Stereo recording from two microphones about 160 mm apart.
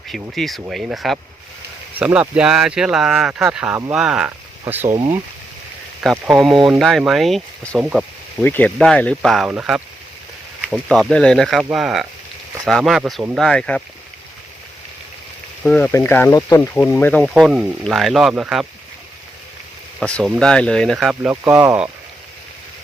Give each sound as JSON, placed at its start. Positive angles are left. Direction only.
{"t": 0.1, "sound": "speech", "side_deg": 0}
{"t": 4.9, "sound": "speech", "side_deg": -30}
{"t": 6.0, "sound": "speech", "side_deg": 0}
{"t": 7.9, "sound": "a sound", "side_deg": 0}
{"t": 8.4, "sound": "speech", "side_deg": 10}
{"t": 10.8, "sound": "speech", "side_deg": 0}
{"t": 15.6, "sound": "speech", "side_deg": 10}
{"t": 20.0, "sound": "speech", "side_deg": 5}